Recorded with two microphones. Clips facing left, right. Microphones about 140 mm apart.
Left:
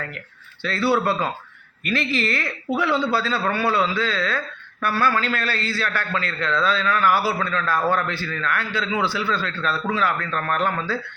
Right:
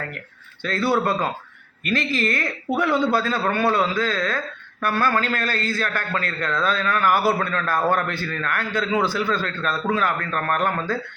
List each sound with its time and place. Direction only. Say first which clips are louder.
0.6 s a man's voice: even; 45° right (ahead or behind)